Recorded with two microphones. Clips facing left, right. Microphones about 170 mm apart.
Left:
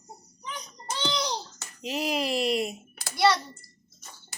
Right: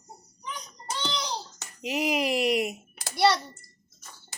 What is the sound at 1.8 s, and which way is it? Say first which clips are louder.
Speech: right 2 dB; 15° right (ahead or behind).